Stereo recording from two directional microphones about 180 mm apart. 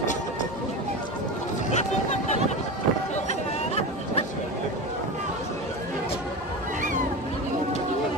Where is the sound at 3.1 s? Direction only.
35° left (ahead or behind).